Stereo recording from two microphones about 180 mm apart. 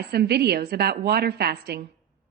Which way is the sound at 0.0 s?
65° right (ahead or behind).